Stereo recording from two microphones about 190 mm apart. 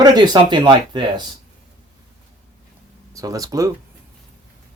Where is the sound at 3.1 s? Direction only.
20° right (ahead or behind).